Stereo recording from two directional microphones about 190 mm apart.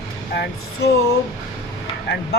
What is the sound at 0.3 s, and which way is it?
Speech, 60° left (ahead or behind).